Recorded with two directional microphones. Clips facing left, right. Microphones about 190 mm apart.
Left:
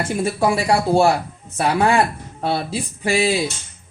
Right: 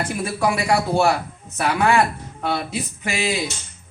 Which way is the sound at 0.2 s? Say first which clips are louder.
Left 4 dB; 30° left (ahead or behind).